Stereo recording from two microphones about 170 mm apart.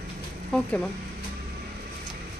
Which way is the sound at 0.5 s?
5° left (ahead or behind).